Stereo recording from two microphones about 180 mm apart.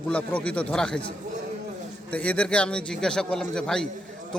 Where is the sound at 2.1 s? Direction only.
5° left (ahead or behind).